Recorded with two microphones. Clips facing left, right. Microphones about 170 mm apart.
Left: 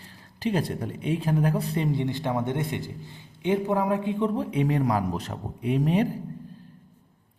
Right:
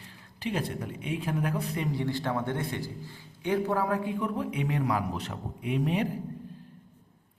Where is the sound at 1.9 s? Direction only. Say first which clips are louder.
Left 3 dB; 20° left (ahead or behind); by 6.0 s 35° left (ahead or behind).